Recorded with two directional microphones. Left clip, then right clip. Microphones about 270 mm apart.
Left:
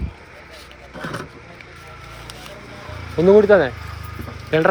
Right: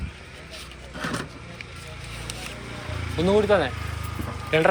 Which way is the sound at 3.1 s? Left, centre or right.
Left.